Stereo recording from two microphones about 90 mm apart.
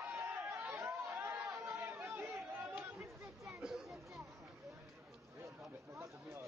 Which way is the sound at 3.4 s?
5° right (ahead or behind).